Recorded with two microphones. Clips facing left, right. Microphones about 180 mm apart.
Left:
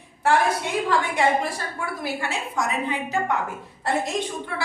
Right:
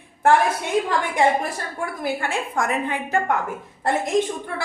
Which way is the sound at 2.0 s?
55° right (ahead or behind).